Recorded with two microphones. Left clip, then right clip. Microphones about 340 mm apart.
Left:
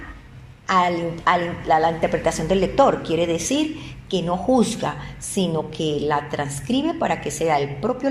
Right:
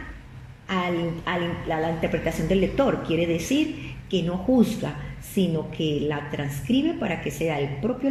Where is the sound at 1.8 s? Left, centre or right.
Left.